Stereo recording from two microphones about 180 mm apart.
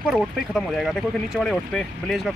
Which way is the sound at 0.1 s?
Centre (ahead or behind).